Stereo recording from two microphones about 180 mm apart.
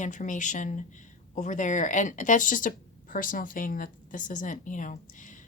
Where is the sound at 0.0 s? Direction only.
45° left (ahead or behind).